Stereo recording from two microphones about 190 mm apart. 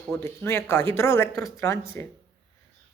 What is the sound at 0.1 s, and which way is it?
Speech, 10° left (ahead or behind).